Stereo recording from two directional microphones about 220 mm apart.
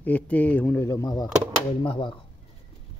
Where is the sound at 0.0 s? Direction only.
5° left (ahead or behind); by 2.2 s 20° left (ahead or behind).